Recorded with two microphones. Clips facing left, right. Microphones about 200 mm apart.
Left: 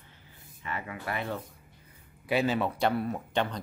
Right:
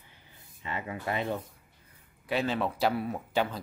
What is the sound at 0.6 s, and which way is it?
Speech, 20° right (ahead or behind).